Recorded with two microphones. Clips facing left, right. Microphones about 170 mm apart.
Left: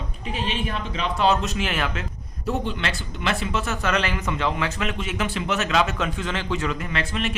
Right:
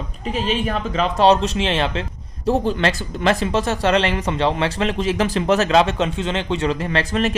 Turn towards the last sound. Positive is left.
turn(degrees=-40)  # may be behind; listen again after turning